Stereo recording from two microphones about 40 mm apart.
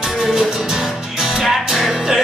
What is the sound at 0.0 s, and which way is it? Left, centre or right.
Music, centre.